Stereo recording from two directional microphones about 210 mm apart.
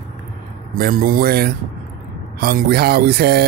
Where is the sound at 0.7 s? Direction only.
45° right (ahead or behind).